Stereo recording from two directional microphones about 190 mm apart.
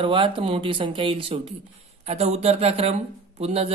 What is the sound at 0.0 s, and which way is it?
Speech, 25° right (ahead or behind).